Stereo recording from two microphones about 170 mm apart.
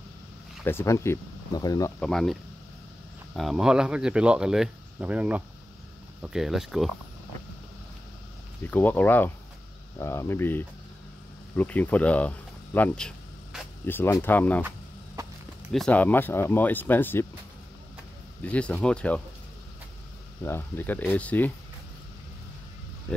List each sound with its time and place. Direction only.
0.7 s speech: 15° left (ahead or behind)
2.0 s speech: 5° left (ahead or behind)
3.3 s speech: centre (ahead or behind)
8.6 s speech: 10° left (ahead or behind)
13.8 s speech: 10° left (ahead or behind)
15.7 s speech: 5° left (ahead or behind)
18.4 s speech: 10° left (ahead or behind)
20.4 s speech: 15° left (ahead or behind)